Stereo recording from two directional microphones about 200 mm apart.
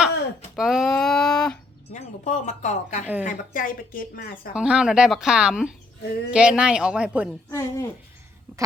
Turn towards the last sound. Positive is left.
turn(degrees=15)  # may be behind; listen again after turning